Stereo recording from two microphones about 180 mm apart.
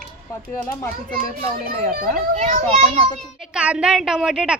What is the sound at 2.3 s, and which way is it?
Speech, 35° right (ahead or behind).